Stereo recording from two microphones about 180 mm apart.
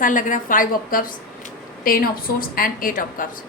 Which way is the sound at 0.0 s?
45° left (ahead or behind).